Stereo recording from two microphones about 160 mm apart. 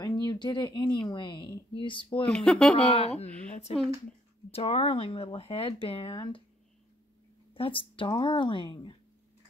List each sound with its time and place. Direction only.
0.0 s speech: 25° left (ahead or behind)
2.2 s speech: 5° left (ahead or behind)
2.9 s a woman's voice: 40° left (ahead or behind)
7.5 s speech: 35° left (ahead or behind)